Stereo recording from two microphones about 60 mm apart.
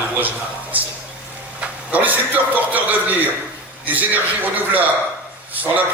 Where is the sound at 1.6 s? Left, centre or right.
Right.